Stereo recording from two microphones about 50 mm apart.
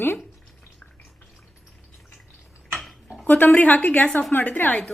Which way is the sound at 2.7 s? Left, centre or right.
Centre.